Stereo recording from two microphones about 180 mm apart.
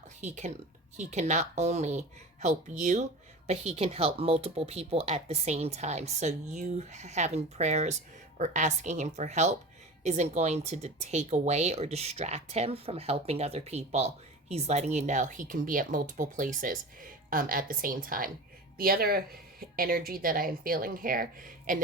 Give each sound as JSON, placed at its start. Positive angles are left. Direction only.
{"t": 0.2, "sound": "speech", "side_deg": -40}